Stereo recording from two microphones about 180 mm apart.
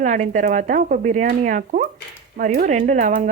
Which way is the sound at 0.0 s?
45° right (ahead or behind).